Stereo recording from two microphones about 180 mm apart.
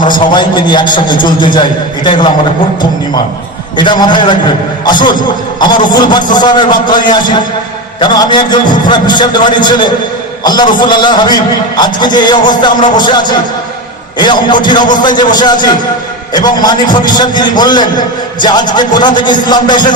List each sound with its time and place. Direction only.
0.0 s a man's voice: 25° left (ahead or behind)
3.8 s a man's voice: 25° left (ahead or behind)